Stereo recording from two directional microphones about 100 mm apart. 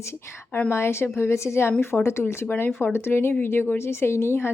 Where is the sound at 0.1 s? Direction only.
25° left (ahead or behind).